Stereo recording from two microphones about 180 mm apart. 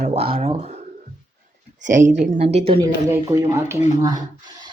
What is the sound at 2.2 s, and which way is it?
Speech, 35° right (ahead or behind).